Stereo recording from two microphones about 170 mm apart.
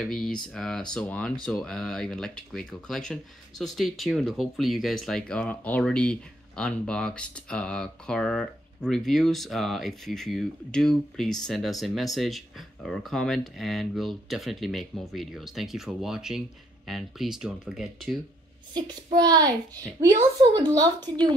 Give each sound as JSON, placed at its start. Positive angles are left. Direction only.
{"t": 0.1, "sound": "speech", "side_deg": 5}
{"t": 19.1, "sound": "speech", "side_deg": -25}